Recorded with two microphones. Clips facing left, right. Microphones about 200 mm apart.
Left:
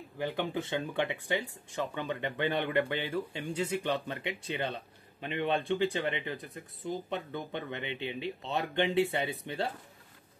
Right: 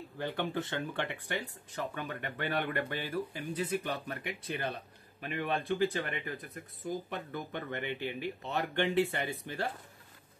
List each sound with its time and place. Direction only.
0.2 s speech: 15° left (ahead or behind)